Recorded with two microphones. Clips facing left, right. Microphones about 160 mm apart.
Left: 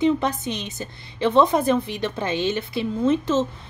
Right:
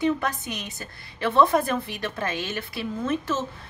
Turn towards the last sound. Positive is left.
turn(degrees=20)  # may be behind; listen again after turning